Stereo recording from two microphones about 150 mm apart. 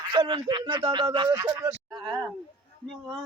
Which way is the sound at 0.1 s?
35° right (ahead or behind).